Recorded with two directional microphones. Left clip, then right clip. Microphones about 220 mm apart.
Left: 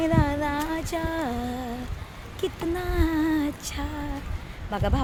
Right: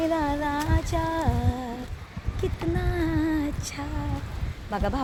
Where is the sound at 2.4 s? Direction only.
30° left (ahead or behind).